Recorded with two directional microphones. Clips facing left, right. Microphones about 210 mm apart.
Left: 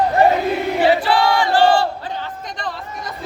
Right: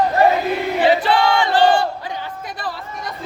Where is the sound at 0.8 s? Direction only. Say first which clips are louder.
Even; 20° right (ahead or behind).